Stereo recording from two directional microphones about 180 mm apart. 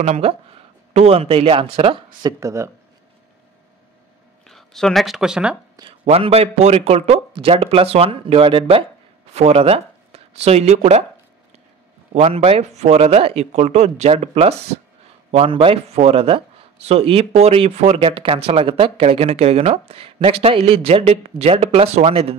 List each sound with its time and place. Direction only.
0.0 s a man's voice: 35° right (ahead or behind)
2.2 s speech: 15° right (ahead or behind)
4.5 s speech: centre (ahead or behind)
5.8 s a man's voice: 30° right (ahead or behind)
12.1 s a man's voice: 35° right (ahead or behind)